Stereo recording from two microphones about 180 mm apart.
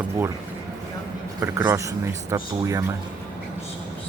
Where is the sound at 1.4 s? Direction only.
15° right (ahead or behind).